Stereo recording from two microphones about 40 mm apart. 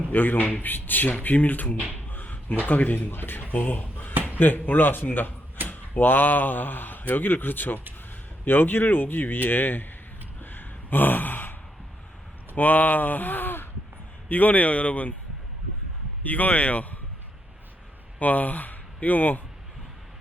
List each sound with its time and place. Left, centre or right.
0.1 s speech: left
3.1 s speech: left
10.4 s gasp: left
12.5 s speech: left
14.3 s speech: left
16.2 s speech: left
18.2 s speech: left